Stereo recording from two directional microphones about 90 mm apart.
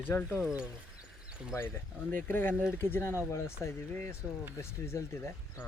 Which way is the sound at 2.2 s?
25° left (ahead or behind).